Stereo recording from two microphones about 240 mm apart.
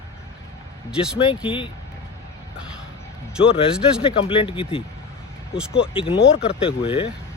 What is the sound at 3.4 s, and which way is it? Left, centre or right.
Speech, left.